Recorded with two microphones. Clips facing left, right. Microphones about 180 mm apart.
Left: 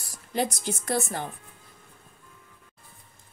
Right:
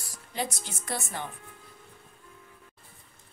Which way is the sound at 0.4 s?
40° left (ahead or behind).